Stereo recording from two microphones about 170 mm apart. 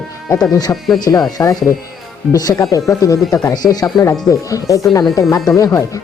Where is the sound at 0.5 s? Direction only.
20° left (ahead or behind).